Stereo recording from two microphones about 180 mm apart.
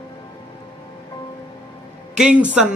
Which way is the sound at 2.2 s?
5° right (ahead or behind).